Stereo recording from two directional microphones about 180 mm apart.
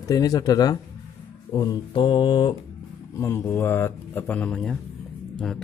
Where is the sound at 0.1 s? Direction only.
20° left (ahead or behind).